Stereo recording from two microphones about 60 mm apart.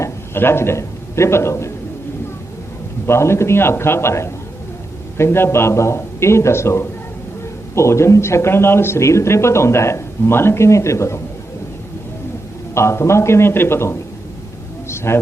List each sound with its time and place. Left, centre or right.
0.3 s speech: left
3.1 s speech: left
12.7 s speech: left
14.8 s a sound: left